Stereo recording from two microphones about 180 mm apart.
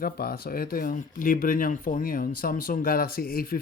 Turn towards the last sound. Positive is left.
turn(degrees=55)  # may be behind; listen again after turning